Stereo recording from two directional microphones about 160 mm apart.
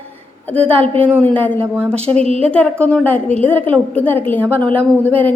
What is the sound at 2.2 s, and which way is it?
Speech, 40° right (ahead or behind).